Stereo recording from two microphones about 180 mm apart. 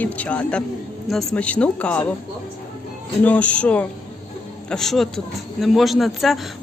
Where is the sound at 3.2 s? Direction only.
10° left (ahead or behind).